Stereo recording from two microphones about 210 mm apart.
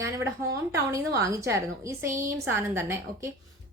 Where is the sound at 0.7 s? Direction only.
15° right (ahead or behind).